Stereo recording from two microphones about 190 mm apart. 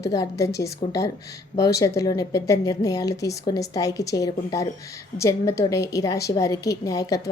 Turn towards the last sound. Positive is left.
turn(degrees=20)  # may be behind; listen again after turning